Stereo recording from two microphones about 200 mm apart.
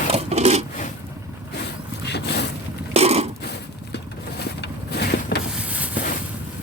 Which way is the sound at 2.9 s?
30° right (ahead or behind).